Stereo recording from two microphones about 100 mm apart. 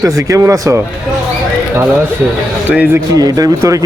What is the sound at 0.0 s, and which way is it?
Speech, 35° right (ahead or behind).